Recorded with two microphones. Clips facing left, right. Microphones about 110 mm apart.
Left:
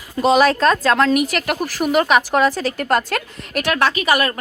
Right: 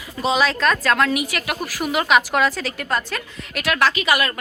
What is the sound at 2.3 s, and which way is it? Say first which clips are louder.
Speech: left 4 dB; 35° left (ahead or behind).